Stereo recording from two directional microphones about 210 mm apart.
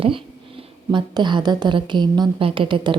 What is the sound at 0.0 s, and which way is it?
A woman's voice, 25° right (ahead or behind).